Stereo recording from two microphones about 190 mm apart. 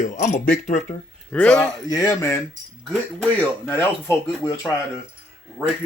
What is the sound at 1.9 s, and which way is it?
Speech, 15° left (ahead or behind).